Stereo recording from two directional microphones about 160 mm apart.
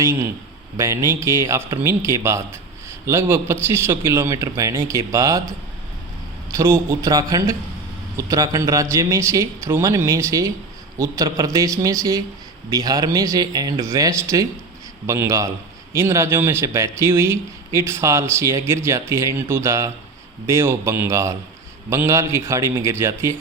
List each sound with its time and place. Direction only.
0.0 s speech: 15° right (ahead or behind)
6.5 s a man's voice: 20° right (ahead or behind)